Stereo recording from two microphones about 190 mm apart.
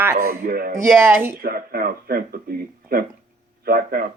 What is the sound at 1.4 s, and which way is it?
Speech, 50° right (ahead or behind).